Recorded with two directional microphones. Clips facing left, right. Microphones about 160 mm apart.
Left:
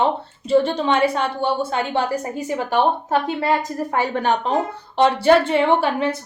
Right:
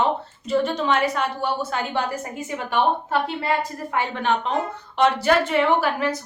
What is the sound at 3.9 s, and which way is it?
Speech, 40° left (ahead or behind).